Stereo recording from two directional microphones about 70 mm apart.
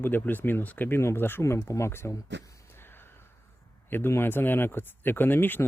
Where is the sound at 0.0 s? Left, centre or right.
Left.